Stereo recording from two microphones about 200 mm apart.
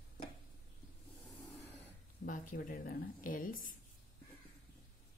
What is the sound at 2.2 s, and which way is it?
A woman's voice, 40° left (ahead or behind).